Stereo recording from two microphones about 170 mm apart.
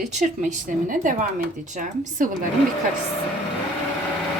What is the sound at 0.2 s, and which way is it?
Speech, 45° right (ahead or behind).